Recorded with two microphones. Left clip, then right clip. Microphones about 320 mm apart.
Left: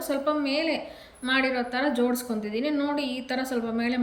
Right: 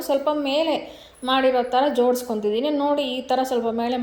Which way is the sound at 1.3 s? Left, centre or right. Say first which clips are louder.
Right 6 dB; centre.